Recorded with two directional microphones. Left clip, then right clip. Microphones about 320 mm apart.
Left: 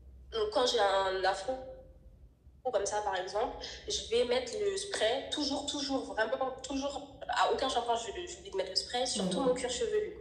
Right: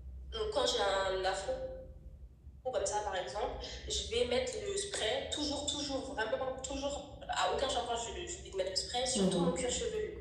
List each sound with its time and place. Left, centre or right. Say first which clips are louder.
0.3 s speech: left 4 dB; left
2.7 s a woman's voice: left 3 dB; left